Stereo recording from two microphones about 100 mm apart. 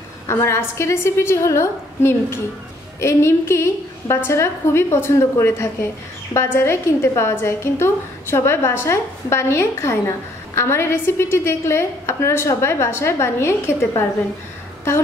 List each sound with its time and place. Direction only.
0.3 s a woman's voice: 25° left (ahead or behind)